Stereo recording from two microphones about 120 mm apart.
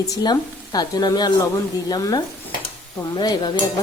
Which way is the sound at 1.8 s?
35° left (ahead or behind).